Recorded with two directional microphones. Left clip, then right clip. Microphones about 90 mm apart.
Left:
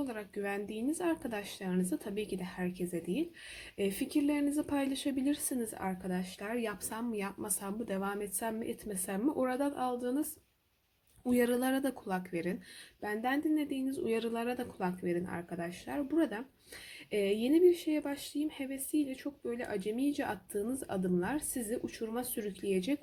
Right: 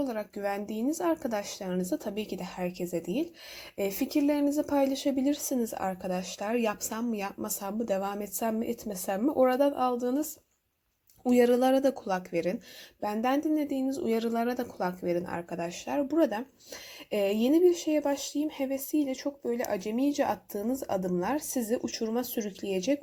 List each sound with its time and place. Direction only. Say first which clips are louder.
0.0 s speech: right 6 dB; 30° right (ahead or behind)
2.0 s speech: right 3 dB; 40° right (ahead or behind)
3.8 s speech: right 4 dB; 25° right (ahead or behind)
5.7 s speech: right 7 dB; 55° right (ahead or behind)
11.3 s speech: right 8 dB; 35° right (ahead or behind)
15.0 s speech: right 6 dB; 45° right (ahead or behind)
15.4 s speech: right 6 dB; 65° right (ahead or behind); by 23.0 s 35° right (ahead or behind)